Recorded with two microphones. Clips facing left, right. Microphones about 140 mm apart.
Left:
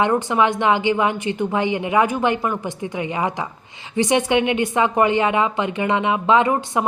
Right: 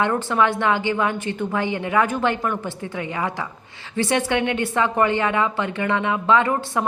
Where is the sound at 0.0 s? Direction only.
15° left (ahead or behind).